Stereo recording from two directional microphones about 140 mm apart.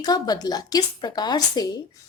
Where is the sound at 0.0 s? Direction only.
30° left (ahead or behind).